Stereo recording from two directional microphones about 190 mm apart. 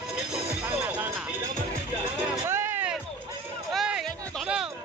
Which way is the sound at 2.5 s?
10° right (ahead or behind).